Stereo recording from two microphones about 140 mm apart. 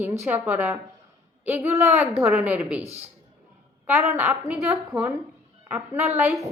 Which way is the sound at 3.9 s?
15° right (ahead or behind).